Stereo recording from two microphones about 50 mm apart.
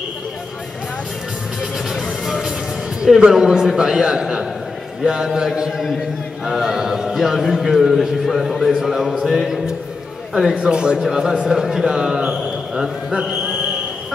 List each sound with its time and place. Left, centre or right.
2.0 s music: centre
3.2 s a man's voice: centre